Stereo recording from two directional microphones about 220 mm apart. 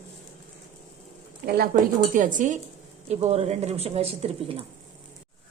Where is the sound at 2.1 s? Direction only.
35° right (ahead or behind).